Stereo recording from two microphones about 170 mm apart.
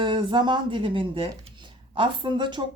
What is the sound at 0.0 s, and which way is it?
Speech, 30° right (ahead or behind).